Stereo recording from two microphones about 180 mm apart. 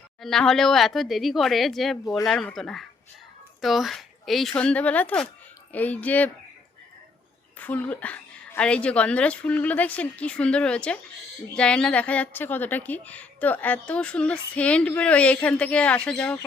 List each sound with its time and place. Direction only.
0.2 s a woman's voice: centre (ahead or behind)
7.6 s a woman's voice: 10° left (ahead or behind)